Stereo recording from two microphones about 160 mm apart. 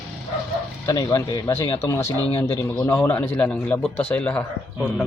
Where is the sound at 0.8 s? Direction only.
20° left (ahead or behind).